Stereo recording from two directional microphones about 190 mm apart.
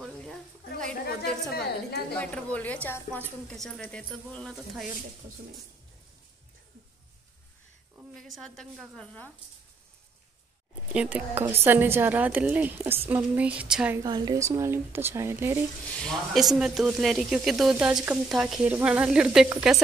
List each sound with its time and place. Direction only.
1.5 s a woman's voice: 55° left (ahead or behind)
2.1 s a woman's voice: 5° left (ahead or behind)
8.1 s speech: centre (ahead or behind)
10.9 s speech: 5° right (ahead or behind)
13.9 s speech: 20° right (ahead or behind)
16.0 s speech: centre (ahead or behind)